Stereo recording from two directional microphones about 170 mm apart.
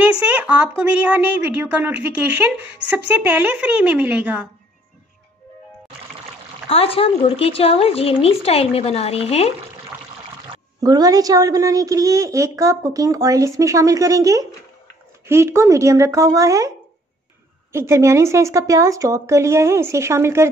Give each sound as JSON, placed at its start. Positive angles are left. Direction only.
{"t": 0.4, "sound": "speech", "side_deg": -10}
{"t": 6.7, "sound": "speech", "side_deg": 35}
{"t": 9.9, "sound": "pour", "side_deg": -10}
{"t": 10.8, "sound": "a woman's voice", "side_deg": -20}
{"t": 17.7, "sound": "speech", "side_deg": -15}